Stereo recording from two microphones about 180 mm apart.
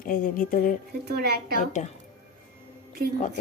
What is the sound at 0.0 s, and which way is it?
Speech, 50° left (ahead or behind).